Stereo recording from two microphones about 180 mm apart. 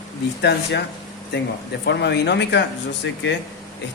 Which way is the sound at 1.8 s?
70° left (ahead or behind).